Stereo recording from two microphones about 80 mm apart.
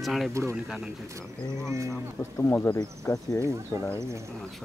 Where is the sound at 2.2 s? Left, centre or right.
Left.